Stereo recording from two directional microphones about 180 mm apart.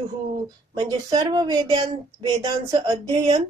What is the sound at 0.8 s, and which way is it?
Speech, 20° right (ahead or behind).